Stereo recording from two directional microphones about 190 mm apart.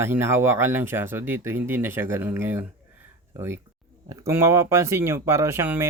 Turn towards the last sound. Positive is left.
turn(degrees=-10)  # may be behind; listen again after turning